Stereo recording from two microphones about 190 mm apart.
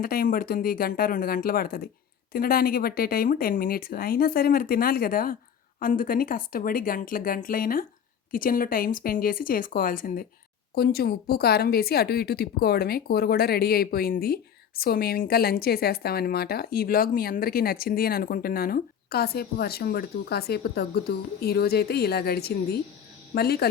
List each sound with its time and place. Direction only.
0.0 s a woman's voice: 50° left (ahead or behind)